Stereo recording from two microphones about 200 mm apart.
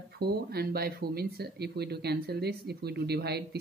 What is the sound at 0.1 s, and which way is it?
Speech, 50° right (ahead or behind).